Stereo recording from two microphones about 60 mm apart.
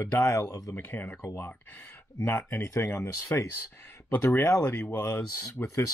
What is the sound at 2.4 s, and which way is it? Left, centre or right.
Speech, left.